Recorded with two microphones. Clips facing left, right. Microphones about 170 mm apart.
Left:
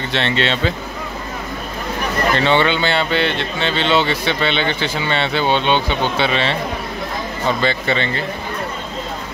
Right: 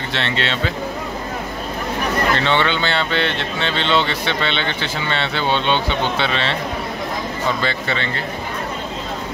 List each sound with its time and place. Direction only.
0.1 s speech: 20° left (ahead or behind)
2.4 s speech: 10° left (ahead or behind)
7.6 s speech: 20° left (ahead or behind)